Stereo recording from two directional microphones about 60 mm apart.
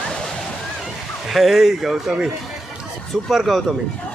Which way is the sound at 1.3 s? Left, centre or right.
Centre.